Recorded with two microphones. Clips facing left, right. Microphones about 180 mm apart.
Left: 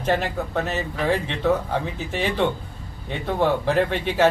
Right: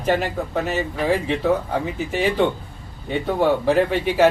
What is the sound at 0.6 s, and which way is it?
Speech, 5° right (ahead or behind).